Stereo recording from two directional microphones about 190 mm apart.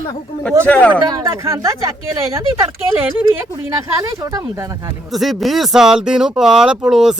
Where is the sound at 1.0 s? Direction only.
15° right (ahead or behind).